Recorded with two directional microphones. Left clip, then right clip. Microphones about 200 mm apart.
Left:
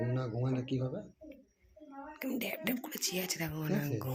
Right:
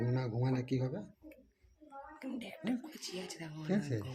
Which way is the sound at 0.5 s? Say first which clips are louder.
Right 1 dB; 55° right (ahead or behind).